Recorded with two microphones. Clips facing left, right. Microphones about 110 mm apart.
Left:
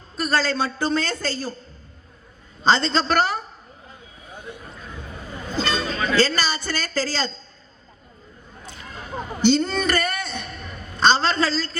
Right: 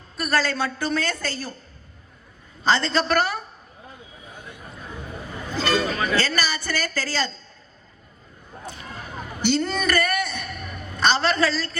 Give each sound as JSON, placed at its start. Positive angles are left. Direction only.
{"t": 0.2, "sound": "a woman's voice", "side_deg": 25}
{"t": 2.6, "sound": "a woman's voice", "side_deg": 25}
{"t": 5.5, "sound": "vehicle", "side_deg": 25}
{"t": 6.1, "sound": "a woman's voice", "side_deg": 30}
{"t": 8.7, "sound": "a sound", "side_deg": -25}
{"t": 9.0, "sound": "a sound", "side_deg": 25}